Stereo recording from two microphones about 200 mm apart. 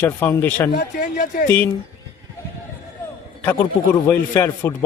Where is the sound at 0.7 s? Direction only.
50° left (ahead or behind).